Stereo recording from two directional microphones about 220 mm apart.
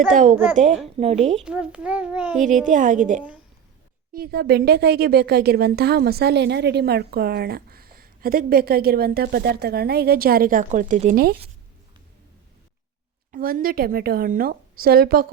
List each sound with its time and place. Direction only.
0.1 s a woman's voice: 35° right (ahead or behind)
0.3 s a child's voice: 5° right (ahead or behind)
0.9 s a woman's voice: 30° right (ahead or behind)
1.4 s a child's voice: 5° right (ahead or behind)
2.6 s a woman's voice: 35° right (ahead or behind)
13.3 s a woman's voice: 40° right (ahead or behind)